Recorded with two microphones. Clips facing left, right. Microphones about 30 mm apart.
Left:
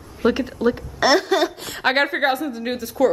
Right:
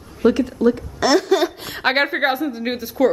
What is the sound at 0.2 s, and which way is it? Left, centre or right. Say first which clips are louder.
A woman's voice: right 3 dB; left.